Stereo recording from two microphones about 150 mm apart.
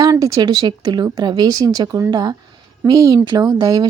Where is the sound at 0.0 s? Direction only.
25° right (ahead or behind).